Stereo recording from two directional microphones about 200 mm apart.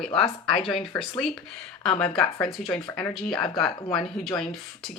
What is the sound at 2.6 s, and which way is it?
Speech, 40° left (ahead or behind).